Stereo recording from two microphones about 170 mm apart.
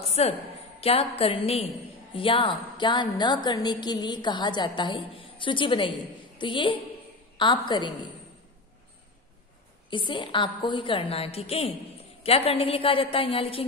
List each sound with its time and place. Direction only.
0.0 s a sound: 40° left (ahead or behind)
0.7 s a woman's voice: 35° left (ahead or behind)
9.8 s a woman's voice: 30° left (ahead or behind)